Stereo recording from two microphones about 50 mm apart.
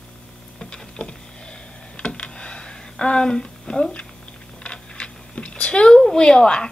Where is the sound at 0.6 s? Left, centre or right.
Centre.